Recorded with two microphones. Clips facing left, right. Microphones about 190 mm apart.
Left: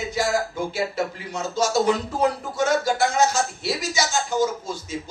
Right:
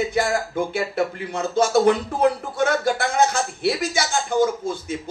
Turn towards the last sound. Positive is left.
turn(degrees=-55)  # may be behind; listen again after turning